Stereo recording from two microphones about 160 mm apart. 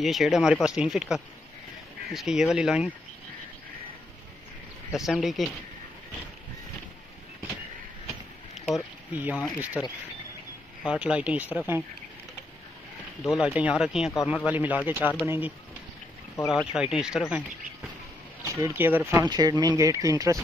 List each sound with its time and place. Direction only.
0.0 s speech: centre (ahead or behind)
4.9 s speech: centre (ahead or behind)
8.7 s speech: 10° right (ahead or behind)
13.3 s speech: 10° right (ahead or behind)
16.4 s speech: 5° right (ahead or behind)
18.4 s speech: 20° right (ahead or behind)
19.2 s speech: 25° right (ahead or behind)